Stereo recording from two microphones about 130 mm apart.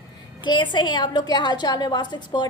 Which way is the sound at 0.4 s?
35° left (ahead or behind).